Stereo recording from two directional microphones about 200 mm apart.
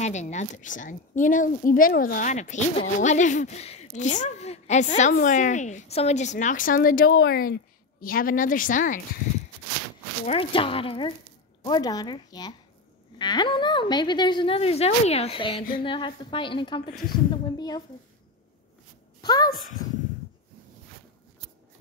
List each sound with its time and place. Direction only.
0.0 s a woman's voice: 35° left (ahead or behind)
10.2 s speech: 30° left (ahead or behind)
19.2 s speech: 20° left (ahead or behind)